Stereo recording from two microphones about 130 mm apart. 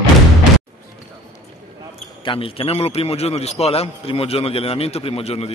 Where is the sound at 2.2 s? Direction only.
45° left (ahead or behind).